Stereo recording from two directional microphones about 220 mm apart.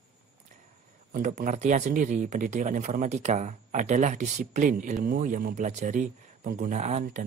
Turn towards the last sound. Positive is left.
turn(degrees=-35)  # may be behind; listen again after turning